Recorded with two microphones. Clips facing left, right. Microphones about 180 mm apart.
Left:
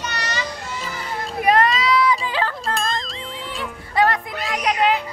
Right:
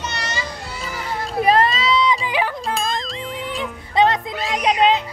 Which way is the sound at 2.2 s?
15° right (ahead or behind).